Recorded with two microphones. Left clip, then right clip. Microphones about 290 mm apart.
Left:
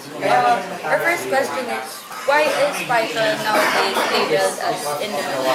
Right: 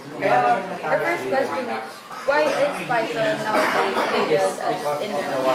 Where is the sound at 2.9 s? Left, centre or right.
Centre.